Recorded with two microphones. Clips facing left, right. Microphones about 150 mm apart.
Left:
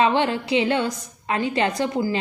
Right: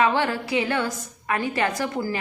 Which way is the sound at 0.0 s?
20° left (ahead or behind).